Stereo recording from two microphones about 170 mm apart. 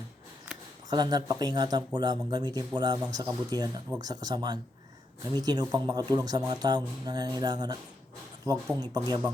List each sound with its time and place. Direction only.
0.9 s speech: 25° right (ahead or behind)